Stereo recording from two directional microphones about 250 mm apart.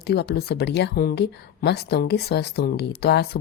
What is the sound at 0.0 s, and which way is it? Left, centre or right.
Speech, left.